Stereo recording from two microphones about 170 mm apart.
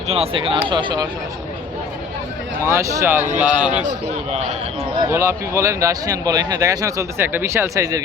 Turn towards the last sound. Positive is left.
turn(degrees=-20)  # may be behind; listen again after turning